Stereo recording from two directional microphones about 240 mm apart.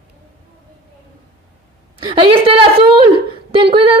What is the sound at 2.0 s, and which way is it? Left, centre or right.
Speech, right.